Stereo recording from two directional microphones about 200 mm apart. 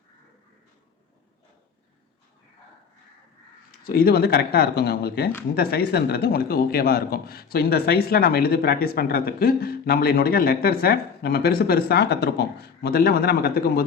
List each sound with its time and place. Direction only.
3.8 s a man's voice: 50° left (ahead or behind)